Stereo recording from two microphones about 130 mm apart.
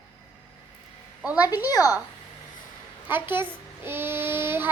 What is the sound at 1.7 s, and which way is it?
Child singing, 30° left (ahead or behind).